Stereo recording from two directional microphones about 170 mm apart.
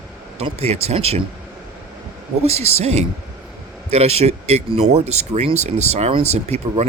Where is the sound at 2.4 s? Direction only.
40° right (ahead or behind).